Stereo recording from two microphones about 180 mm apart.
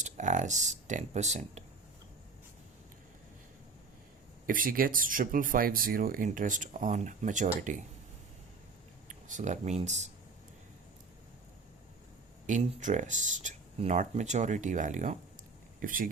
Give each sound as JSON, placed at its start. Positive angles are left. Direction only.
{"t": 0.0, "sound": "speech", "side_deg": -45}
{"t": 4.4, "sound": "speech", "side_deg": -50}
{"t": 9.0, "sound": "speech", "side_deg": -45}
{"t": 12.5, "sound": "speech", "side_deg": -40}